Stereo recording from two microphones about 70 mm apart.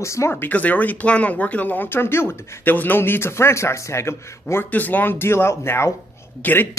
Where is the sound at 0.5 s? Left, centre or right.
Left.